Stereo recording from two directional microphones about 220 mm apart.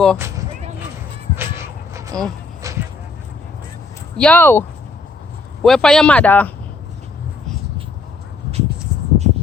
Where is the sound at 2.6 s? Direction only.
15° right (ahead or behind).